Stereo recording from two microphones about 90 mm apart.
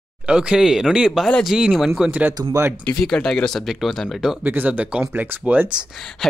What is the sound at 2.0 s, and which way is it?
Speech, 15° right (ahead or behind).